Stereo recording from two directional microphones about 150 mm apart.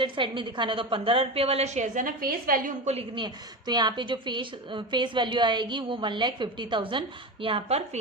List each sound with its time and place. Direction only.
0.0 s a woman's voice: 30° right (ahead or behind); by 2.7 s 70° right (ahead or behind)
3.2 s a woman's voice: 30° right (ahead or behind)